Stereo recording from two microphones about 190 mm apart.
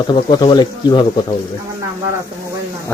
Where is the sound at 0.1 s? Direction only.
25° left (ahead or behind).